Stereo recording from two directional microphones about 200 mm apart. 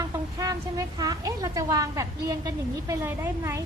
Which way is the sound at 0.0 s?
15° right (ahead or behind).